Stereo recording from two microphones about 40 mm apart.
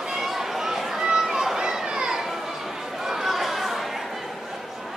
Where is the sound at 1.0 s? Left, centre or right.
Centre.